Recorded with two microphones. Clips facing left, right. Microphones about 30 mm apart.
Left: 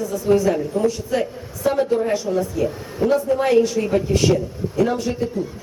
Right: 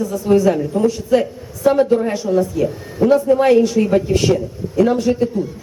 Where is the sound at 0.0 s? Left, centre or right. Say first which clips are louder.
Right 3 dB; centre.